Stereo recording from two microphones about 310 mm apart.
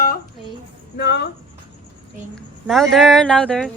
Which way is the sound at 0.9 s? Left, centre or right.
Left.